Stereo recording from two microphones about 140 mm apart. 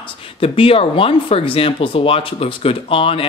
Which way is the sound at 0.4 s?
40° left (ahead or behind).